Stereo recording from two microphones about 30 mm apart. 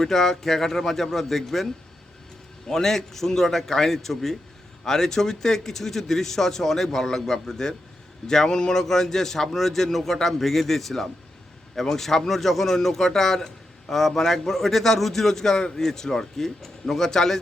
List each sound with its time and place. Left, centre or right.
0.0 s speech: centre
2.6 s a man's voice: centre